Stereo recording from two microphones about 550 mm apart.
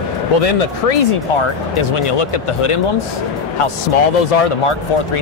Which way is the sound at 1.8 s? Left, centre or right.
Left.